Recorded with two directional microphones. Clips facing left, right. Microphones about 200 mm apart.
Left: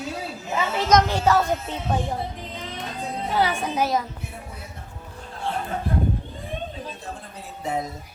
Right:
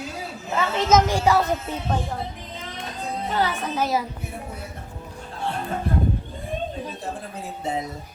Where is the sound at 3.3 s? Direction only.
10° left (ahead or behind).